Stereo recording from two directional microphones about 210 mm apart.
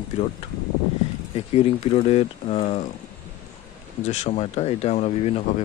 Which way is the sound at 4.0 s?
35° left (ahead or behind).